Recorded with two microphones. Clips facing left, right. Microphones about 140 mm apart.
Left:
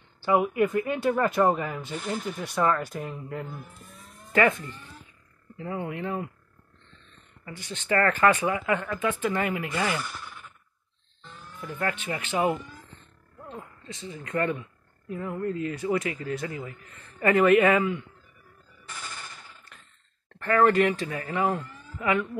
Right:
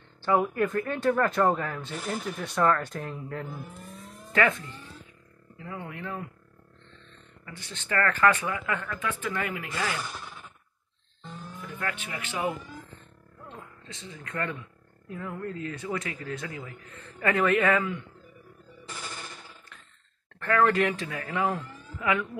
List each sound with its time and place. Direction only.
0.2 s speech: 10° left (ahead or behind)
5.6 s speech: 25° left (ahead or behind)
7.4 s speech: 15° left (ahead or behind)
11.8 s speech: 25° left (ahead or behind)
13.5 s speech: 10° left (ahead or behind)
20.3 s speech: 5° left (ahead or behind)